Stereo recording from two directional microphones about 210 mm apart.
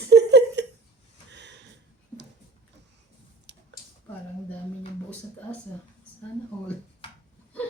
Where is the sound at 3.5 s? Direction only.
55° right (ahead or behind).